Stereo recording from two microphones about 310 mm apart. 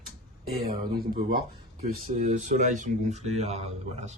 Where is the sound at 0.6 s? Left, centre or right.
Right.